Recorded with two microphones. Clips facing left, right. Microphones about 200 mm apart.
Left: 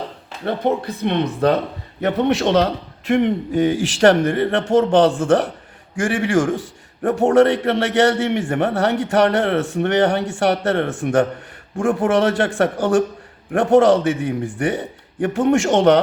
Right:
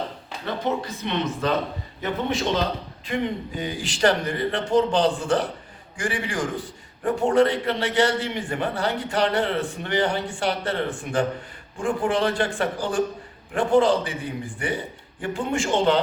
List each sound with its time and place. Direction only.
0.4 s a man's voice: 60° left (ahead or behind); by 16.0 s 80° left